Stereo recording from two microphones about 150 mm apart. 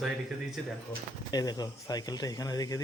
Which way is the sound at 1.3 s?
25° left (ahead or behind).